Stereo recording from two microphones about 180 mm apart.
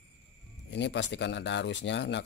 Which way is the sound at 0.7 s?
75° left (ahead or behind).